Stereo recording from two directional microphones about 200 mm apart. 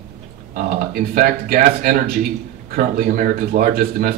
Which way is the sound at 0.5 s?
45° right (ahead or behind).